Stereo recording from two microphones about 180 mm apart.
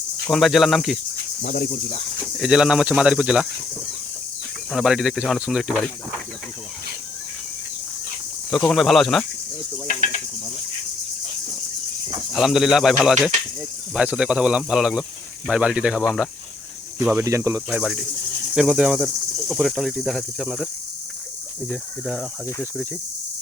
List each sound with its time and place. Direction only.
0.3 s cricket: centre (ahead or behind)
1.4 s cricket: 50° left (ahead or behind)
2.4 s cricket: 5° right (ahead or behind)
4.7 s cricket: centre (ahead or behind)
8.4 s cricket: centre (ahead or behind)
12.3 s cricket: centre (ahead or behind)
17.0 s speech: 10° right (ahead or behind)
17.7 s cricket: centre (ahead or behind)
21.7 s cricket: centre (ahead or behind)